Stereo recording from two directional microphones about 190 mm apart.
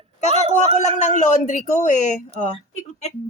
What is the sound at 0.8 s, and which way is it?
Speech, 40° left (ahead or behind).